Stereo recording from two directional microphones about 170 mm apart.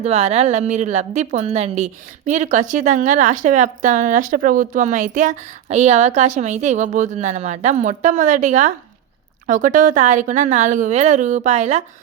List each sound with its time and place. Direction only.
0.0 s a woman's voice: 35° right (ahead or behind)